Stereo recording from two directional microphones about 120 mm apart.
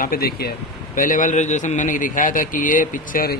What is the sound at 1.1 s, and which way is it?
A man's voice, 85° left.